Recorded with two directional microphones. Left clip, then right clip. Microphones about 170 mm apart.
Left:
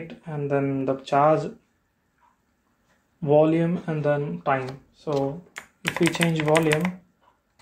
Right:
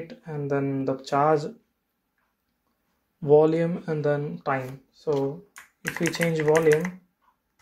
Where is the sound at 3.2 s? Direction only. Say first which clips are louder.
Even; 25° right (ahead or behind).